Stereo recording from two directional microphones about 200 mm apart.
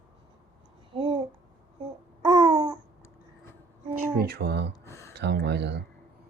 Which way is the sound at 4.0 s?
50° right (ahead or behind).